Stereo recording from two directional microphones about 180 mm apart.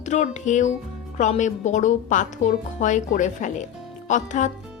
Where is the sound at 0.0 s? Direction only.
40° left (ahead or behind).